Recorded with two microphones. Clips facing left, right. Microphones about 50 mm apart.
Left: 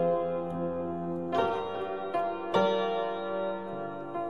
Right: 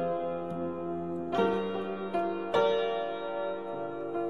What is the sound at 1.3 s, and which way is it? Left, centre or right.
Music, centre.